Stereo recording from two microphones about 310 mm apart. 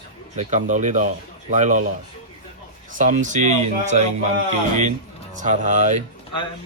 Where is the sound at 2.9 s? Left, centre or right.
Right.